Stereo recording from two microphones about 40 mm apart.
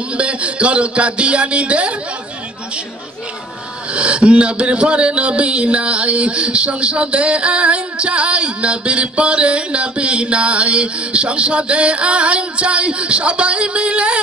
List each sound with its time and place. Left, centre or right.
0.2 s speech: right
3.9 s speech: right